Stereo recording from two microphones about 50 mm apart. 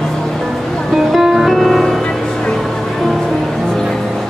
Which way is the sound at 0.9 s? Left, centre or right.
Centre.